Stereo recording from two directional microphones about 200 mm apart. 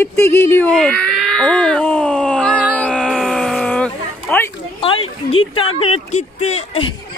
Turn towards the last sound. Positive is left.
turn(degrees=30)  # may be behind; listen again after turning